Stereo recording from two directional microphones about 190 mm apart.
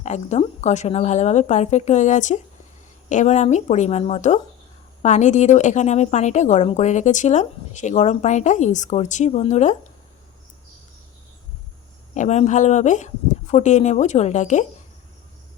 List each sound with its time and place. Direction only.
0.0 s a woman's voice: 35° left (ahead or behind)
12.1 s a woman's voice: 40° left (ahead or behind)